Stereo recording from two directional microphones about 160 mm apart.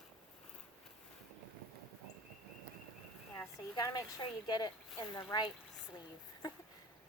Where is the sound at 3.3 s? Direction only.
20° left (ahead or behind).